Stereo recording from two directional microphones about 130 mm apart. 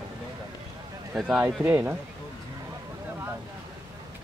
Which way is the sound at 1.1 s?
Centre (ahead or behind).